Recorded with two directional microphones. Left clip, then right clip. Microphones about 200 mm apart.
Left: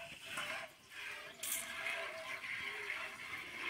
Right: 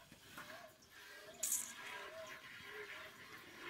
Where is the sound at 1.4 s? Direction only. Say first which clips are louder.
Right 1 dB; 5° right (ahead or behind).